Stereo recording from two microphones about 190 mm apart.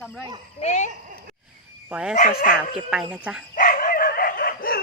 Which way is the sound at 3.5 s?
45° left (ahead or behind).